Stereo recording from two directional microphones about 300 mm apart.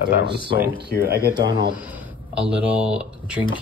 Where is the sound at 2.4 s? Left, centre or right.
Centre.